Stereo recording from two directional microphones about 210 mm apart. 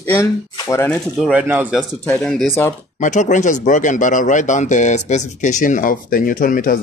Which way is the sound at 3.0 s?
35° left (ahead or behind).